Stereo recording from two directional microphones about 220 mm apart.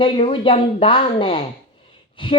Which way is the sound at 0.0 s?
25° left (ahead or behind).